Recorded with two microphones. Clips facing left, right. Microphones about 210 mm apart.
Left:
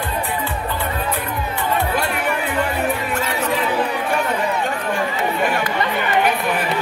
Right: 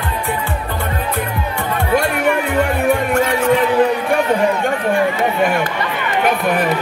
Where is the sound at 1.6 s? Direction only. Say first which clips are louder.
Right 4 dB; 50° right (ahead or behind).